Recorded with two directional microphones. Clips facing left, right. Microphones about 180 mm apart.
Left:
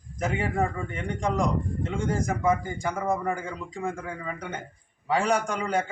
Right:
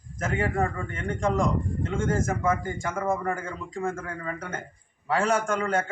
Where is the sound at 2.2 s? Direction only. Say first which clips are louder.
Left 1 dB; 15° left (ahead or behind).